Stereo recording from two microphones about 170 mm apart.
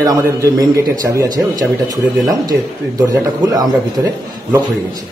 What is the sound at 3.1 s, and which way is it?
A man's voice, 20° right (ahead or behind).